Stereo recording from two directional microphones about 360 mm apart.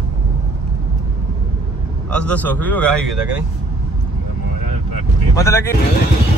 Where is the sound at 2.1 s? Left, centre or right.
Centre.